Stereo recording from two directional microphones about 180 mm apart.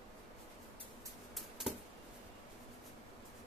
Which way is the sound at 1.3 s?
Centre (ahead or behind).